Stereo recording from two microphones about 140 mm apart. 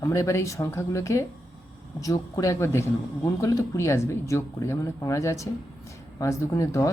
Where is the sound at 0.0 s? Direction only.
25° left (ahead or behind).